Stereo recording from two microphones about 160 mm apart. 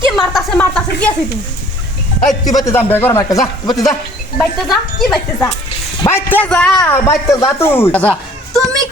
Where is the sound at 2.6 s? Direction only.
15° left (ahead or behind).